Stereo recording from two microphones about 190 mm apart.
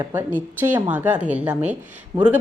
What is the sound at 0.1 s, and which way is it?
Speech, 10° right (ahead or behind).